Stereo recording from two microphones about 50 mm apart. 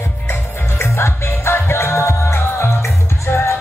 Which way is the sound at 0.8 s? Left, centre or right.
Left.